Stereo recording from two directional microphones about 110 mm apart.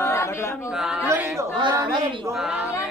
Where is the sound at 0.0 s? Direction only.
25° left (ahead or behind).